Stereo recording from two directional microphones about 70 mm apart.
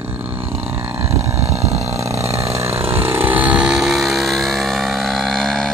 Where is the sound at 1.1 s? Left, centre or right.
Right.